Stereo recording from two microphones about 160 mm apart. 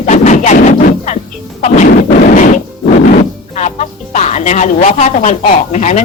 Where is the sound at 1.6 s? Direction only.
50° left (ahead or behind).